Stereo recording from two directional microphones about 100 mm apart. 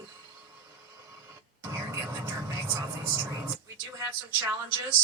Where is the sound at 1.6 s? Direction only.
25° right (ahead or behind).